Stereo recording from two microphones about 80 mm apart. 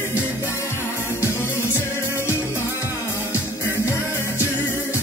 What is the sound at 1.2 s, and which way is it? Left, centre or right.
Music, left.